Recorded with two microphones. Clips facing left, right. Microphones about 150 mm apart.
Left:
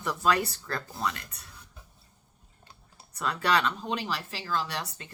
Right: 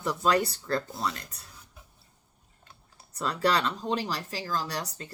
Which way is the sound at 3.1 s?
35° right (ahead or behind).